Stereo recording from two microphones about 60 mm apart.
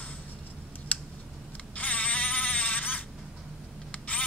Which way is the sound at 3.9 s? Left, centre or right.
Left.